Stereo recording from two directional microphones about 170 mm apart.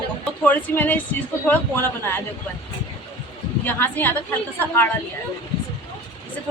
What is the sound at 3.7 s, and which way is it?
Speech, 10° left (ahead or behind).